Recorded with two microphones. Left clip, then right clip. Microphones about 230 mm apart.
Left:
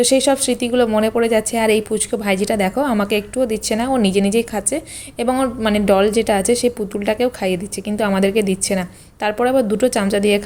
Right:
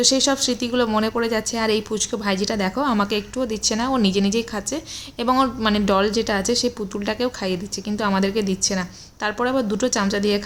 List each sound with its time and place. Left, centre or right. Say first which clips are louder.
0.0 s a woman's voice: left 4 dB; centre